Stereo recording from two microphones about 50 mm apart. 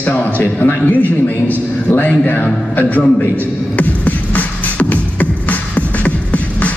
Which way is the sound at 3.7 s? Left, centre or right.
Left.